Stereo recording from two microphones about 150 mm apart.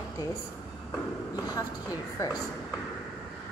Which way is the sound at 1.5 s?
25° left (ahead or behind).